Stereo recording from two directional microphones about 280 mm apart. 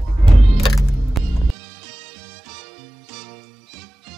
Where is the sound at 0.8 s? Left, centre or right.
Centre.